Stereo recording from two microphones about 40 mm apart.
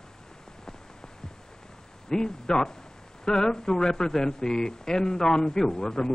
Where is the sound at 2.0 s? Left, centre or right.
Centre.